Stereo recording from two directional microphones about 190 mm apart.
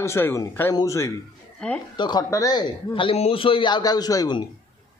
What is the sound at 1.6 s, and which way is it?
Speech, 5° left (ahead or behind).